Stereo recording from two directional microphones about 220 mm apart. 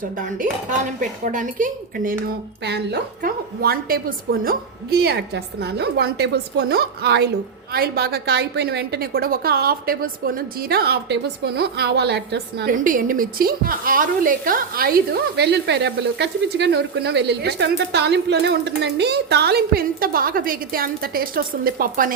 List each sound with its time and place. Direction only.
0.9 s a woman's voice: 35° right (ahead or behind)